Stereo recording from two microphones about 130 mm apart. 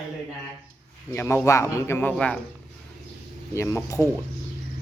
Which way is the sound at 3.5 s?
25° left (ahead or behind).